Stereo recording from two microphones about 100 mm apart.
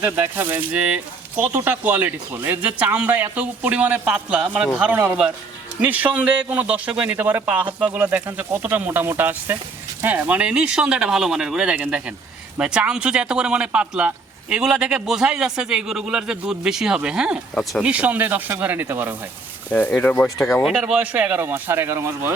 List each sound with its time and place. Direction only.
0.0 s speech: 20° right (ahead or behind)
17.6 s speech: centre (ahead or behind)
17.8 s speech: 15° right (ahead or behind)
19.7 s speech: 15° left (ahead or behind)
20.7 s speech: 5° right (ahead or behind); by 22.4 s 25° right (ahead or behind)